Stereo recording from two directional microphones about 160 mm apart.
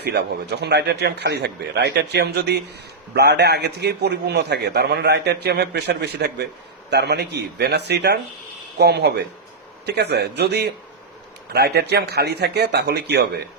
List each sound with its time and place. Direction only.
0.0 s a man's voice: 90° right